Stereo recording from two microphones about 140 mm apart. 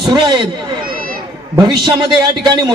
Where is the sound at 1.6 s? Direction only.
35° right (ahead or behind).